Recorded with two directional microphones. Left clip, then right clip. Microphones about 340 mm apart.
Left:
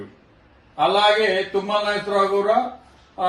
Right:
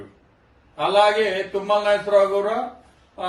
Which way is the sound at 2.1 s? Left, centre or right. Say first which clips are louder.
Right 1 dB; centre.